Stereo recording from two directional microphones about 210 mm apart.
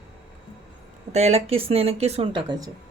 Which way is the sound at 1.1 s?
30° right (ahead or behind).